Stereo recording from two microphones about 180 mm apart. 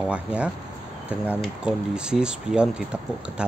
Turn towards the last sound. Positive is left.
turn(degrees=-5)  # may be behind; listen again after turning